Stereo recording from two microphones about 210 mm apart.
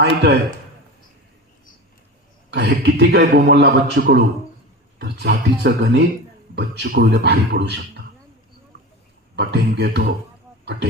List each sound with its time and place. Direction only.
0.0 s a man's voice: 50° right (ahead or behind)
2.5 s a man's voice: 55° right (ahead or behind)
9.3 s a man's voice: 50° right (ahead or behind)